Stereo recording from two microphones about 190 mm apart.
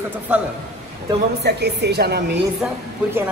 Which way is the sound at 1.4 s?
60° right (ahead or behind).